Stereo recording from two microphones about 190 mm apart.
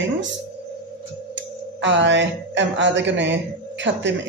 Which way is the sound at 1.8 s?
70° right (ahead or behind).